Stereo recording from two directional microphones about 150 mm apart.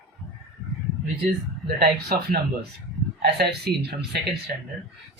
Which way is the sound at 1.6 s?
90° right.